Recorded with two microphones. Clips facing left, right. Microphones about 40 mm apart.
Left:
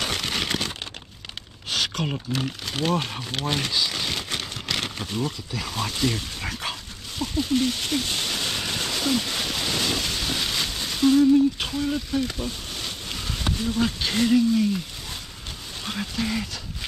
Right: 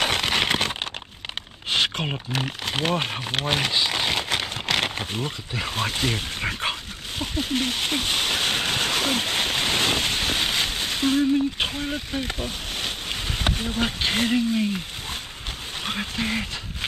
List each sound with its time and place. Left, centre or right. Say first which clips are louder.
0.0 s a sound: right 5 dB; right
2.4 s speech: right 2 dB; right
3.3 s crumpling: right 2 dB; right
15.8 s speech: right 1 dB; right